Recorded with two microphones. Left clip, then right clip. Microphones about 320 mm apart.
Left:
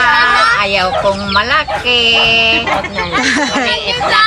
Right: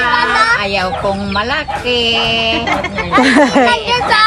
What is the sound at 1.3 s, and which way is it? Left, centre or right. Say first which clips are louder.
Speech: left 4 dB; centre.